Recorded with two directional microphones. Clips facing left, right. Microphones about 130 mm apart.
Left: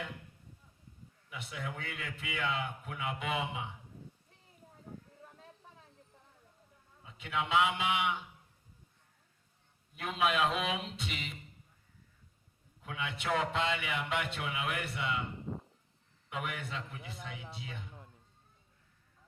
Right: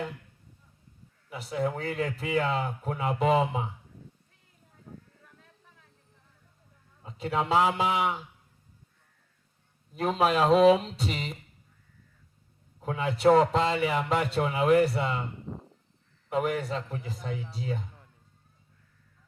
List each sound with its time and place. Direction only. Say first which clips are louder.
1.3 s speech: right 12 dB; 40° right (ahead or behind)
7.0 s speech: right 7 dB; 40° right (ahead or behind)
9.9 s speech: right 7 dB; 40° right (ahead or behind)
12.8 s speech: right 15 dB; 40° right (ahead or behind)
16.3 s speech: right 11 dB; 40° right (ahead or behind)